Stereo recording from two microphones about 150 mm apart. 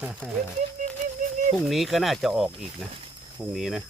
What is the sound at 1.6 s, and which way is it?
Sheep, centre (ahead or behind).